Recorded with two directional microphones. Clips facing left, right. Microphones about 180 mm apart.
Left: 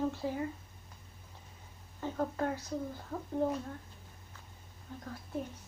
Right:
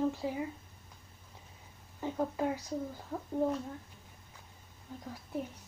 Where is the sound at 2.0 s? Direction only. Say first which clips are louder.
Right 1 dB; 10° right (ahead or behind).